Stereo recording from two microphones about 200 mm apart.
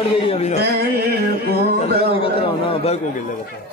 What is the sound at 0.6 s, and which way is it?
Music, 50° right (ahead or behind).